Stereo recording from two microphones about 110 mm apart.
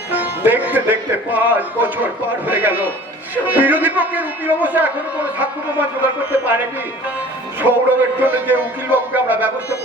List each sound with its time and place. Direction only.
0.1 s a man's voice: 15° right (ahead or behind)
7.6 s a man's voice: 15° right (ahead or behind)